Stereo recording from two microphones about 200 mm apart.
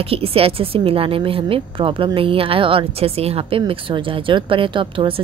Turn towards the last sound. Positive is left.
turn(degrees=-25)  # may be behind; listen again after turning